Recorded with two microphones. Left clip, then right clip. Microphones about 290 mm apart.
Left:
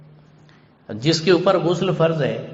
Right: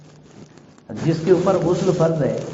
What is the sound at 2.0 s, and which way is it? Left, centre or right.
Speech, left.